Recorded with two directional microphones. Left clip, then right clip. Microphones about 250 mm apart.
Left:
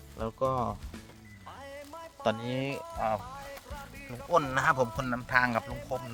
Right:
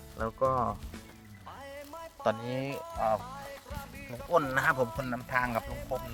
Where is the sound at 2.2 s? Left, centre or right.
Centre.